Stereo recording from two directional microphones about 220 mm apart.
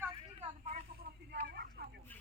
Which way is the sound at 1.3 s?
45° right (ahead or behind).